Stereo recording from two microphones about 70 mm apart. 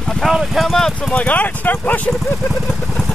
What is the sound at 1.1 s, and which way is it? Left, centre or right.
Speech, centre.